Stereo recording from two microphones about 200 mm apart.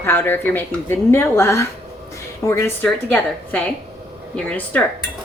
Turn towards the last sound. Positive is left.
turn(degrees=5)  # may be behind; listen again after turning